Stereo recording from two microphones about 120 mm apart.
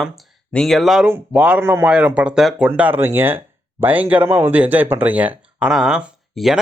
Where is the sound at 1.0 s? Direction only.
10° right (ahead or behind).